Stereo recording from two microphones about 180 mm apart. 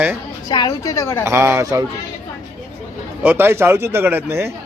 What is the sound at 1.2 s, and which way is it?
Speech, 15° right (ahead or behind).